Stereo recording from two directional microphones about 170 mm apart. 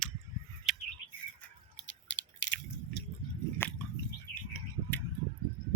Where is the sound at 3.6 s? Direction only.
10° left (ahead or behind).